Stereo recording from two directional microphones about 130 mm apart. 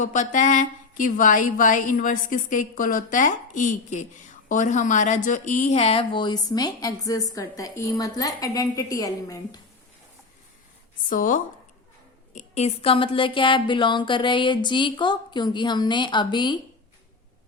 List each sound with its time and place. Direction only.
0.0 s speech: 70° left (ahead or behind); by 9.6 s 25° left (ahead or behind)
11.1 s speech: 90° left
12.3 s speech: 60° left (ahead or behind); by 16.6 s 35° left (ahead or behind)